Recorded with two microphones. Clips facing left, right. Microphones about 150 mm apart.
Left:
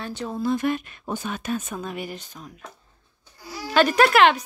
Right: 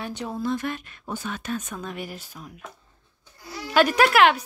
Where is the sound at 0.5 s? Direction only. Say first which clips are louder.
Left 5 dB; 15° left (ahead or behind); by 2.7 s 5° right (ahead or behind).